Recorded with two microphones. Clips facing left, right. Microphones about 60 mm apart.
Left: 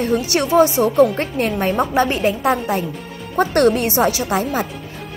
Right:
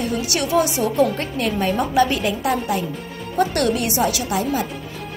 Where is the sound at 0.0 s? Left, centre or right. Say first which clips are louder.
Left 4 dB; left.